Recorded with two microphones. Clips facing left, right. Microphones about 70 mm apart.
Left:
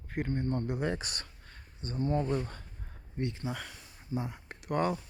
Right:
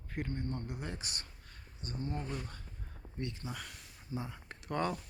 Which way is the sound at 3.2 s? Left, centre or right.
Left.